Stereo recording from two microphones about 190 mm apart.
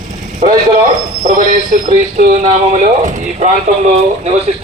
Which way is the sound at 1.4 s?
40° right (ahead or behind).